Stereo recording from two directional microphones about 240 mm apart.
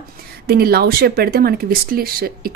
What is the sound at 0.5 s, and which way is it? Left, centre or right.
A woman's voice, right.